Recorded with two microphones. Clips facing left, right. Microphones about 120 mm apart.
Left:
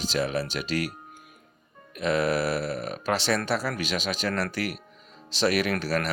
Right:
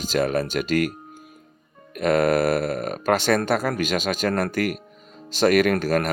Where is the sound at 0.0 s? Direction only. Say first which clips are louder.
Right 5 dB; 50° right (ahead or behind).